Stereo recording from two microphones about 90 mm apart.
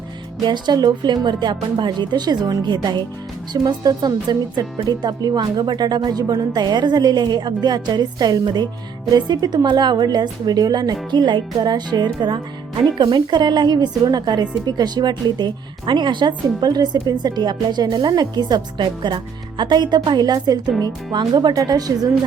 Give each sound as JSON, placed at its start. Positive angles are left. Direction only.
{"t": 0.4, "sound": "a woman's voice", "side_deg": -55}